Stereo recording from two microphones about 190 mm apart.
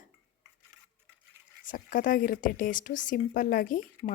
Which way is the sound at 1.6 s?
45° left (ahead or behind).